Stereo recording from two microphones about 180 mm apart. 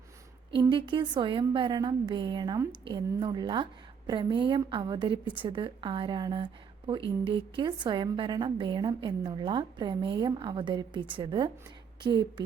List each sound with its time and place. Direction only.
0.6 s a woman's voice: 25° right (ahead or behind)